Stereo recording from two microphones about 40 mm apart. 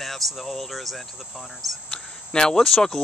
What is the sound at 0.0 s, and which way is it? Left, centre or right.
Speech, centre.